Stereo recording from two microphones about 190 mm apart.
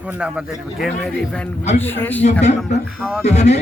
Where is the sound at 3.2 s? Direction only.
35° left (ahead or behind).